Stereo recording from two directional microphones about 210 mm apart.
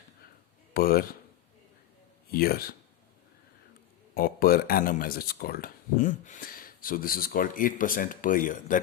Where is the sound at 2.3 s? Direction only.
45° left (ahead or behind).